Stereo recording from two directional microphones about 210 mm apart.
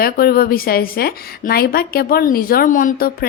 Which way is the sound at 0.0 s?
45° left (ahead or behind).